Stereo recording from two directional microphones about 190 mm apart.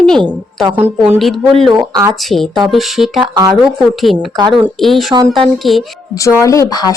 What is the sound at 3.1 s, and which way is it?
Speech, 20° right (ahead or behind).